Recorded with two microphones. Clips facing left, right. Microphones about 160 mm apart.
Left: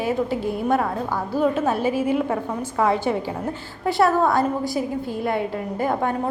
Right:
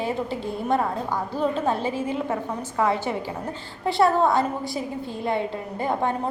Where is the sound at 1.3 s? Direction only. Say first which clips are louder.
Left 4 dB; 5° left (ahead or behind).